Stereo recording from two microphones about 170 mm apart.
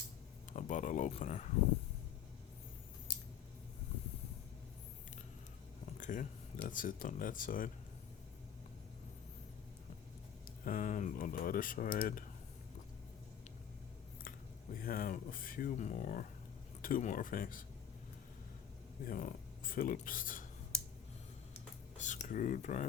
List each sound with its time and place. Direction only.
0.5 s speech: 45° left (ahead or behind)
6.0 s speech: 50° left (ahead or behind)
10.4 s speech: 50° left (ahead or behind)
14.3 s speech: 55° left (ahead or behind)
19.0 s speech: 55° left (ahead or behind)
22.0 s speech: 45° left (ahead or behind)